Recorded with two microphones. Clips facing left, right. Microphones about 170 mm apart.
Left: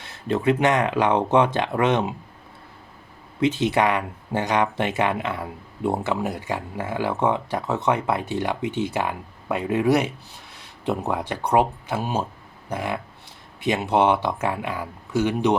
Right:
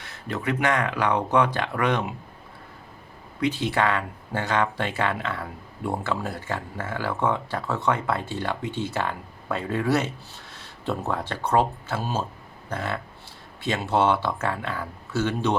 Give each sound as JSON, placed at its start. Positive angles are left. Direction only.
{"t": 0.3, "sound": "speech", "side_deg": 25}
{"t": 3.4, "sound": "speech", "side_deg": 20}